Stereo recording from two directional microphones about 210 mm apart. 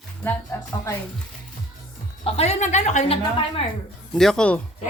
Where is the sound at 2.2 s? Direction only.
30° left (ahead or behind).